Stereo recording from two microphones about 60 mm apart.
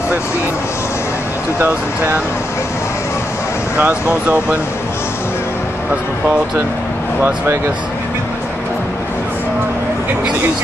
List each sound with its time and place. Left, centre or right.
1.6 s speech: right
3.7 s speech: right